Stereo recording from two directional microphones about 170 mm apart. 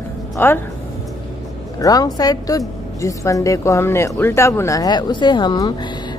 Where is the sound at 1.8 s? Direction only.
20° left (ahead or behind).